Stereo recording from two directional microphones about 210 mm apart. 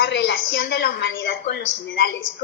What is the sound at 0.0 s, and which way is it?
A woman's voice, 55° left (ahead or behind).